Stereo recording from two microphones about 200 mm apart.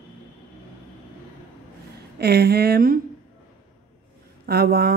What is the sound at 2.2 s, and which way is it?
Speech, 50° right (ahead or behind).